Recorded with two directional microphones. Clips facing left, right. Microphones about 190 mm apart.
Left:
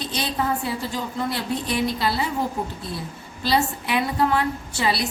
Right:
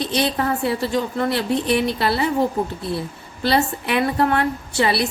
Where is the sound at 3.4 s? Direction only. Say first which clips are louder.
Right 3 dB; 60° right (ahead or behind).